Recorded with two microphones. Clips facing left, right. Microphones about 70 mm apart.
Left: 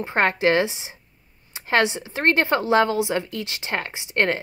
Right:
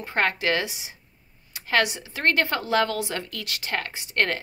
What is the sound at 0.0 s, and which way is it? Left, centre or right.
Speech, left.